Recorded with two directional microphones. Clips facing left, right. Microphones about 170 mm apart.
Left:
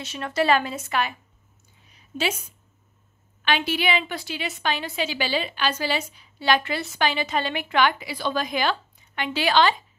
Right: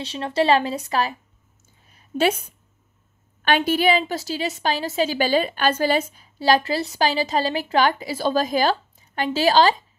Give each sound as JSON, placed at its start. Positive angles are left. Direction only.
{"t": 0.0, "sound": "a woman's voice", "side_deg": -30}
{"t": 1.9, "sound": "a sound", "side_deg": -50}
{"t": 3.4, "sound": "a woman's voice", "side_deg": -50}